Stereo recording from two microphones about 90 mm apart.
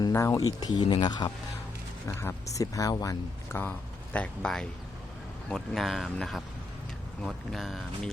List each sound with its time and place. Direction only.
0.1 s speech: 35° left (ahead or behind); by 1.3 s 50° left (ahead or behind)
2.0 s speech: 35° left (ahead or behind)
3.5 s speech: 25° left (ahead or behind); by 8.1 s centre (ahead or behind)